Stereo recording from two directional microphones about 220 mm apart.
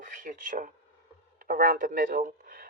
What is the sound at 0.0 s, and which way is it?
Speech, 35° right (ahead or behind).